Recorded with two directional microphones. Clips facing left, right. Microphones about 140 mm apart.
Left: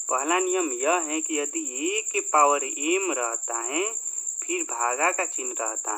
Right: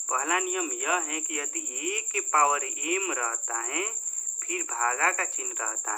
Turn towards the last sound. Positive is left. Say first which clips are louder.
# left 5 dB
turn(degrees=20)  # may be behind; listen again after turning